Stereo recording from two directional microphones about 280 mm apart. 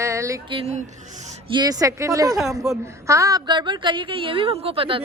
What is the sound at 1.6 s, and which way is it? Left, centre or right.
Speech, centre.